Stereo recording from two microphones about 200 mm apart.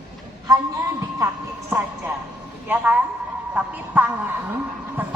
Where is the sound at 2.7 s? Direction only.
10° right (ahead or behind).